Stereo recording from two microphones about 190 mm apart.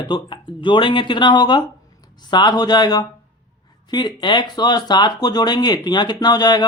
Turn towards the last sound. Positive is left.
turn(degrees=20)  # may be behind; listen again after turning